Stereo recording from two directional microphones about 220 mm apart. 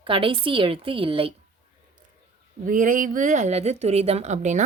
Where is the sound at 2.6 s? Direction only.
35° right (ahead or behind).